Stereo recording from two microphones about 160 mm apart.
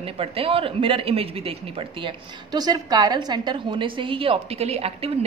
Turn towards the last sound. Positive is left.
turn(degrees=-40)  # may be behind; listen again after turning